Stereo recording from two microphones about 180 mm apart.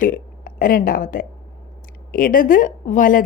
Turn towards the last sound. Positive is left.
turn(degrees=45)  # may be behind; listen again after turning